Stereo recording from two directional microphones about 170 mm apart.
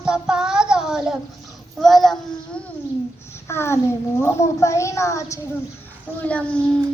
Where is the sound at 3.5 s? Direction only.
15° left (ahead or behind).